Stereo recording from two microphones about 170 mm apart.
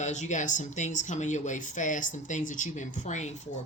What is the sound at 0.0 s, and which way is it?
Speech, 45° left (ahead or behind).